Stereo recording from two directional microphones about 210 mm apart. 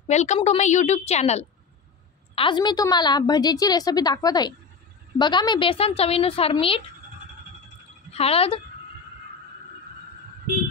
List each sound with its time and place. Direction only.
0.1 s a woman's voice: 35° left (ahead or behind)
8.1 s a woman's voice: 30° left (ahead or behind)